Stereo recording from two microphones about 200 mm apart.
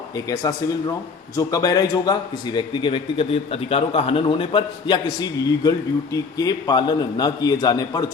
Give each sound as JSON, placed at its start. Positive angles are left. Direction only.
{"t": 0.3, "sound": "a man's voice", "side_deg": 15}